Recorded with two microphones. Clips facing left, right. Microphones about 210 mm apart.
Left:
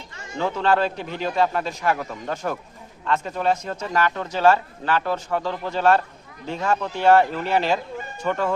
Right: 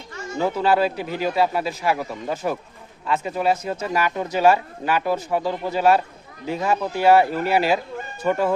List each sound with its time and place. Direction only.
0.3 s speech: 10° right (ahead or behind)